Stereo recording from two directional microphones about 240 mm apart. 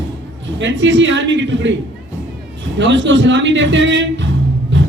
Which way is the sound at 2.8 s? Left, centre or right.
Right.